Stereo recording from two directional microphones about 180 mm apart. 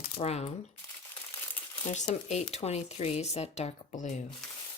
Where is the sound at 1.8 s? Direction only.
40° left (ahead or behind).